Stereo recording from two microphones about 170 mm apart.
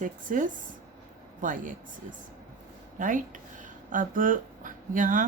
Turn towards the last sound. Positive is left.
turn(degrees=-50)  # may be behind; listen again after turning